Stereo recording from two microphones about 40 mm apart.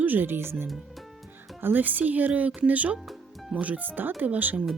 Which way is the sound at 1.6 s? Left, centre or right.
Right.